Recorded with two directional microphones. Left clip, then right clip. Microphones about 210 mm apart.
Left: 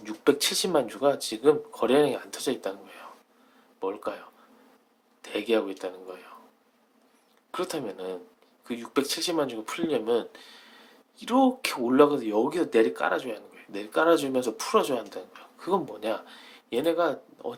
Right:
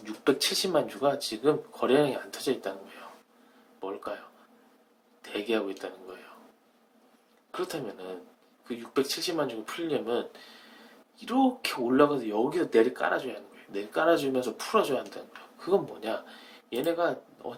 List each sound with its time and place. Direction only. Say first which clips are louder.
0.0 s speech: left 3 dB; 20° left (ahead or behind)
3.8 s speech: left 5 dB; 25° left (ahead or behind)
5.2 s speech: left 4 dB; 20° left (ahead or behind)
7.5 s speech: left 3 dB; 30° left (ahead or behind)
11.2 s speech: left 3 dB; 30° left (ahead or behind)